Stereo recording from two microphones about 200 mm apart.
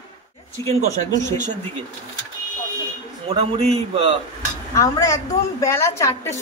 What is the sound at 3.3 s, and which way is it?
Speech, 30° right (ahead or behind).